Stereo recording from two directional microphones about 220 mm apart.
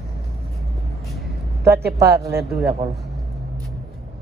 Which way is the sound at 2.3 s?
Centre (ahead or behind).